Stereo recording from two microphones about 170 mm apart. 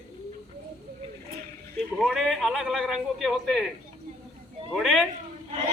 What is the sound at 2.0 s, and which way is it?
A man's voice, centre (ahead or behind).